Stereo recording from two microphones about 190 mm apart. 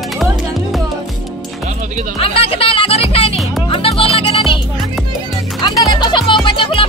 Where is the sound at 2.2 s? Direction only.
30° left (ahead or behind).